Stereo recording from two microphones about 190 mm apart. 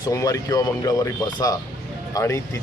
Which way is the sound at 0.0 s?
20° left (ahead or behind).